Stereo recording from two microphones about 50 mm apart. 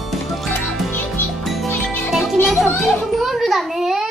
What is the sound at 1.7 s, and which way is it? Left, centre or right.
Music, left.